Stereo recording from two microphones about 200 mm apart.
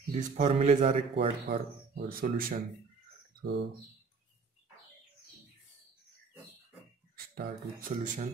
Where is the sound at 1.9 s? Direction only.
45° right (ahead or behind).